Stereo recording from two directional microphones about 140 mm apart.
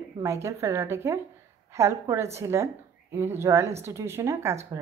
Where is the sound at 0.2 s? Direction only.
20° right (ahead or behind).